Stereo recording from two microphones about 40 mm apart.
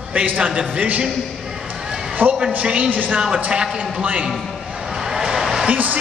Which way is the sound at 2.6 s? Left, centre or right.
Right.